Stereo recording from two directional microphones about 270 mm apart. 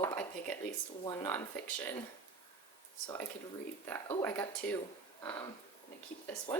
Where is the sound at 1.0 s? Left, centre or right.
Centre.